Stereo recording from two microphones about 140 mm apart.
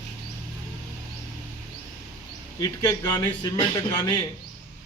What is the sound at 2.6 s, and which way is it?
A man's voice, 25° left (ahead or behind).